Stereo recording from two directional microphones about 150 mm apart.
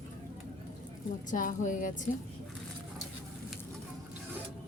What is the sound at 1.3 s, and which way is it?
Speech, 60° left (ahead or behind).